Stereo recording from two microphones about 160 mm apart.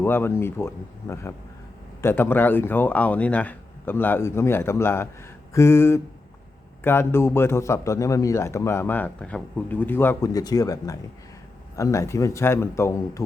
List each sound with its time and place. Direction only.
0.0 s a man's voice: 15° left (ahead or behind)